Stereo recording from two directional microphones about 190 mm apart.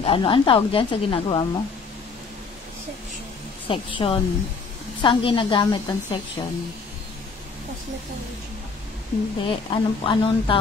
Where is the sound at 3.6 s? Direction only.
25° left (ahead or behind).